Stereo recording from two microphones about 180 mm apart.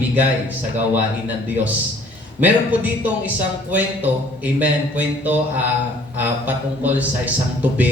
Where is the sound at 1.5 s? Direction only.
10° right (ahead or behind).